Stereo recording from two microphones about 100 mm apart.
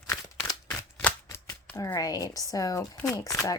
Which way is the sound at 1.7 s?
35° left (ahead or behind).